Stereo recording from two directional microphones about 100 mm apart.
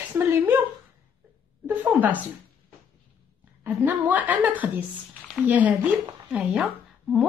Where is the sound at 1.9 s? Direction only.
20° right (ahead or behind).